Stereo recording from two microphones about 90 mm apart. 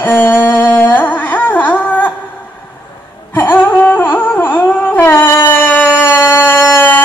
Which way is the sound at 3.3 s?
20° left (ahead or behind).